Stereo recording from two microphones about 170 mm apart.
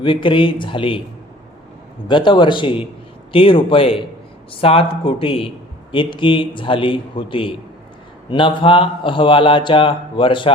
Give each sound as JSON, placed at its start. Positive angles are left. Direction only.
{"t": 0.0, "sound": "speech", "side_deg": 30}
{"t": 2.0, "sound": "a man's voice", "side_deg": 30}